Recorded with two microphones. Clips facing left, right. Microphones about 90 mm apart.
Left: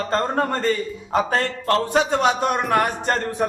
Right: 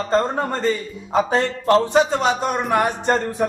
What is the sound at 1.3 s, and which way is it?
Speech, 15° right (ahead or behind).